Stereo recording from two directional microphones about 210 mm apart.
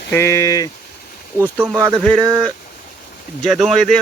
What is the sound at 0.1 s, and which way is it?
Speech, 15° left (ahead or behind).